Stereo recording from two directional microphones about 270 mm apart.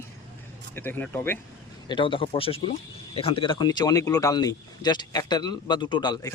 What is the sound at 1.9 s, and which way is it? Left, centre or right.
Speech, centre.